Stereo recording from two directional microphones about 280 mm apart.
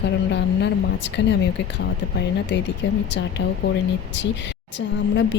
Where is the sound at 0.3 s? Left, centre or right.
Left.